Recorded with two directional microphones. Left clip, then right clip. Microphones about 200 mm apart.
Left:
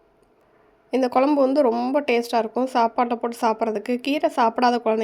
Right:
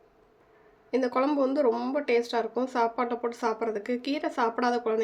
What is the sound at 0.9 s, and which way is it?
Speech, 40° left (ahead or behind).